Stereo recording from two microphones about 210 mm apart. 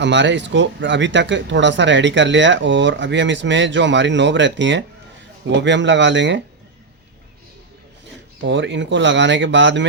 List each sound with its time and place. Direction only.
0.0 s speech: 55° right (ahead or behind)
8.4 s speech: 60° right (ahead or behind)